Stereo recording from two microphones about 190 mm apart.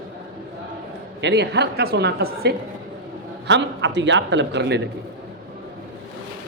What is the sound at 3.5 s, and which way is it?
A man's voice, 70° right (ahead or behind).